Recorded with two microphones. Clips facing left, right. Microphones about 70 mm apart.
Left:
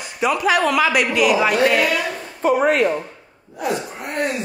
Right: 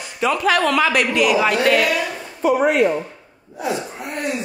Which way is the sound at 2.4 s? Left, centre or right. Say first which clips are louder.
Even; left.